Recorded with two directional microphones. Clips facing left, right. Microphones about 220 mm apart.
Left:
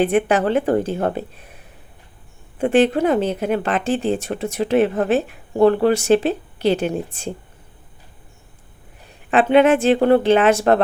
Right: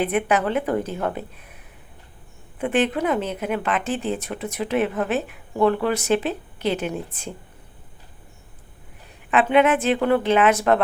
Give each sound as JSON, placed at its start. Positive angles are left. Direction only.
{"t": 0.0, "sound": "a woman's voice", "side_deg": 30}
{"t": 2.6, "sound": "a woman's voice", "side_deg": 30}
{"t": 9.3, "sound": "a woman's voice", "side_deg": 30}